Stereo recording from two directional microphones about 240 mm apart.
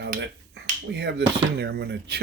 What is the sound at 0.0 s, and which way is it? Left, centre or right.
Finger snapping, right.